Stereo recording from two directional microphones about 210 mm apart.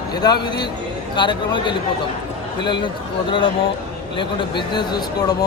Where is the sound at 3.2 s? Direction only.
25° left (ahead or behind).